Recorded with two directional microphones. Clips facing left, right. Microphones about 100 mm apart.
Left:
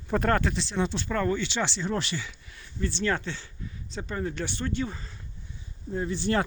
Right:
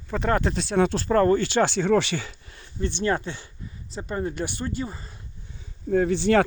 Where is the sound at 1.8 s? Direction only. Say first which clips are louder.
Right 9 dB; 80° right.